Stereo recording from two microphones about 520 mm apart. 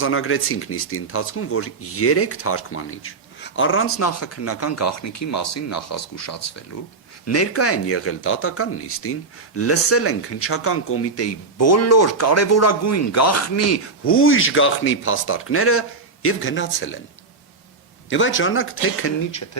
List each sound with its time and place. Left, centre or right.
0.0 s speech: left
18.1 s speech: left